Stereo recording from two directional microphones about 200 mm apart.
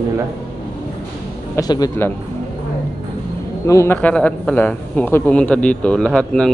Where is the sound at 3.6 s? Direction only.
15° left (ahead or behind).